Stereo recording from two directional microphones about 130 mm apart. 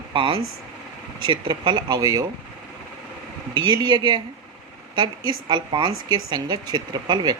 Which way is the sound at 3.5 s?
35° right (ahead or behind).